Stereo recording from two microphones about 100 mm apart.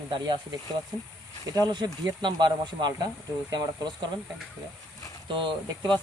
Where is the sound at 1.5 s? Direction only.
40° right (ahead or behind).